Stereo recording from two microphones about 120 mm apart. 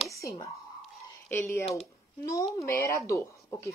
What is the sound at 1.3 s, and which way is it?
A child's voice, 25° left (ahead or behind).